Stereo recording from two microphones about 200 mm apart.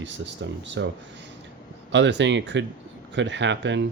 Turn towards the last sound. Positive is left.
turn(degrees=-65)  # may be behind; listen again after turning